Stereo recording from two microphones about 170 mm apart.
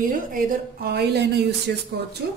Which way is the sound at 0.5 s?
70° right (ahead or behind).